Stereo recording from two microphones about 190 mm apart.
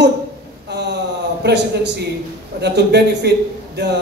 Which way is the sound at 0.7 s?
60° right (ahead or behind).